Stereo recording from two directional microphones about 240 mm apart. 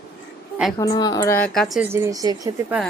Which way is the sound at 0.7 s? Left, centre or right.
Centre.